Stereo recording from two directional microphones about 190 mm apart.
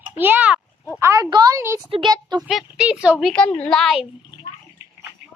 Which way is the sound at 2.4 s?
Centre (ahead or behind).